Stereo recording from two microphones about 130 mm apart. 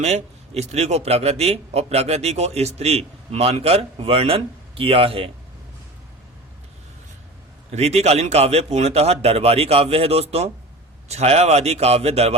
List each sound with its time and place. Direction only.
0.0 s a man's voice: 60° right (ahead or behind)
7.7 s a man's voice: 55° right (ahead or behind)